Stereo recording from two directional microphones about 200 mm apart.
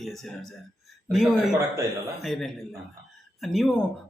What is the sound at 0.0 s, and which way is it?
A man's voice, centre (ahead or behind).